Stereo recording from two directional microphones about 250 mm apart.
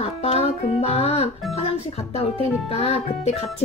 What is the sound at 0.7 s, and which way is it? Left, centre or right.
Speech, left.